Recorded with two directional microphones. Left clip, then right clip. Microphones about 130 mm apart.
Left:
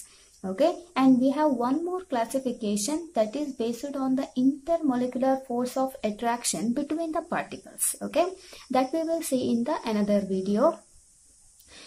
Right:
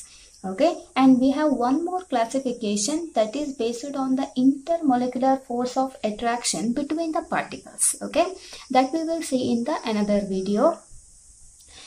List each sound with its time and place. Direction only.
0.4 s a woman's voice: 40° left (ahead or behind)